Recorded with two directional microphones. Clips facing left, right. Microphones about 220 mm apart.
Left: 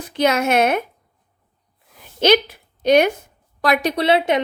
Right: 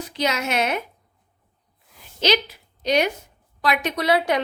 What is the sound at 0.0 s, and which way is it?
Speech, 55° left (ahead or behind).